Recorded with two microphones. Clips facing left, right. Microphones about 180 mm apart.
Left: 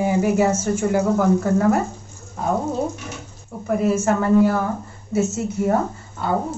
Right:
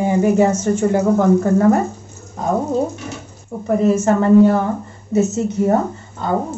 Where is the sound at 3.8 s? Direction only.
5° left (ahead or behind).